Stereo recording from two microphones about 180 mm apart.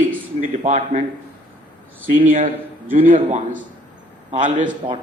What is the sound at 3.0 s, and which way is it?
A man's voice, 35° right (ahead or behind).